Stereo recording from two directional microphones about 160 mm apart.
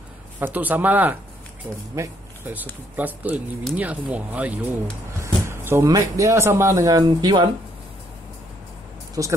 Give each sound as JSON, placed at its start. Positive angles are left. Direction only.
{"t": 0.4, "sound": "speech", "side_deg": -10}
{"t": 9.2, "sound": "speech", "side_deg": -20}